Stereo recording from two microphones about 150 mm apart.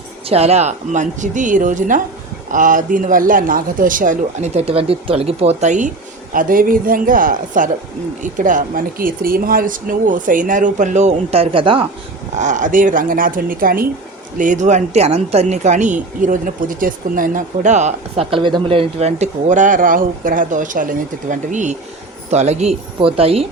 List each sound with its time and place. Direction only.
0.3 s speech: 45° right (ahead or behind)
6.3 s speech: 65° right (ahead or behind); by 11.9 s 35° right (ahead or behind)
12.4 s speech: 55° right (ahead or behind); by 13.8 s 70° right (ahead or behind)
14.3 s a woman's voice: 60° right (ahead or behind)
18.3 s speech: 35° right (ahead or behind)